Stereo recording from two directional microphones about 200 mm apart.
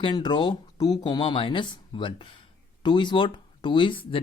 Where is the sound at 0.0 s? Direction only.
20° left (ahead or behind).